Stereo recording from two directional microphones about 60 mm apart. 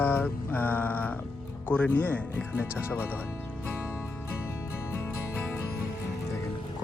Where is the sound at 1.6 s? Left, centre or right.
Left.